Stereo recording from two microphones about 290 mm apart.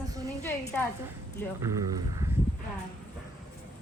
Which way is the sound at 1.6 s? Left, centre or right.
Centre.